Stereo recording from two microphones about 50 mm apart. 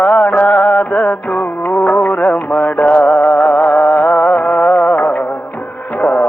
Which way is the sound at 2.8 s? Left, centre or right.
Left.